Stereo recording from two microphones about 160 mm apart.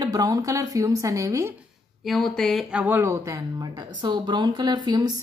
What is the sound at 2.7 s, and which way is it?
A woman's voice, 10° right (ahead or behind).